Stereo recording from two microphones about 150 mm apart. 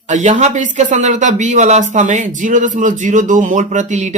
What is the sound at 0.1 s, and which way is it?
A man's voice, 50° right (ahead or behind).